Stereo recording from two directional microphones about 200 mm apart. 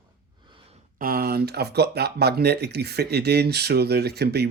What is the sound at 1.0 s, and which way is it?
Speech, 50° right (ahead or behind).